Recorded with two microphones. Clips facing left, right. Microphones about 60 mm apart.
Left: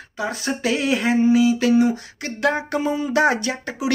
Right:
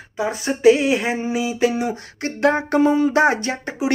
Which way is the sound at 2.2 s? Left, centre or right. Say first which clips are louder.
Right 4 dB; right.